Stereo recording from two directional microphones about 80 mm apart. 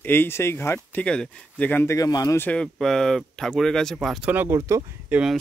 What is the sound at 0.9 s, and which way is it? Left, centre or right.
Speech, centre.